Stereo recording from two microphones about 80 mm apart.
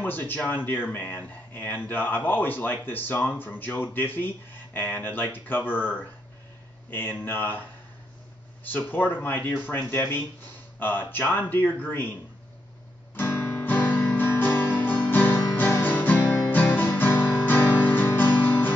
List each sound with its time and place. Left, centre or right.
0.0 s speech: left
8.6 s speech: left
13.1 s guitar: left